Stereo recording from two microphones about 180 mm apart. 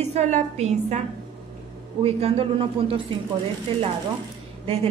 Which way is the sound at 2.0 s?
30° right (ahead or behind).